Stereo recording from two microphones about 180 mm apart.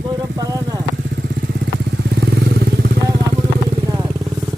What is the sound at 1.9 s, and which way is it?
Motorcycle, 70° right (ahead or behind).